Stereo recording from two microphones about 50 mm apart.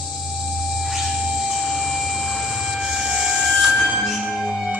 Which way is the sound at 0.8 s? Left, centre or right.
Centre.